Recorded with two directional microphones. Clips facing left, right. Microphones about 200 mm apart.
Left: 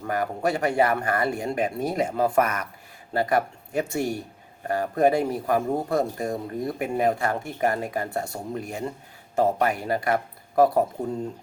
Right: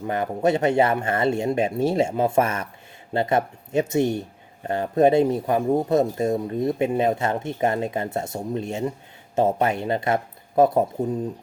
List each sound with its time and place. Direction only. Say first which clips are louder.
0.1 s speech: right 4 dB; 20° right (ahead or behind)